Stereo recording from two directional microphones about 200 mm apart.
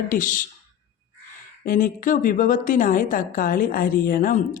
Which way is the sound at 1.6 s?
45° left (ahead or behind).